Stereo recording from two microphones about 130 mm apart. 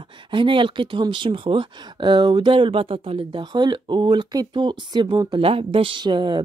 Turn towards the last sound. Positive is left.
turn(degrees=-40)  # may be behind; listen again after turning